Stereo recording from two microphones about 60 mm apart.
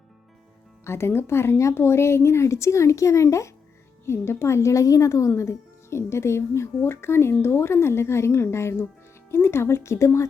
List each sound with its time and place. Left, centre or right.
0.9 s speech: left
4.0 s a woman's voice: left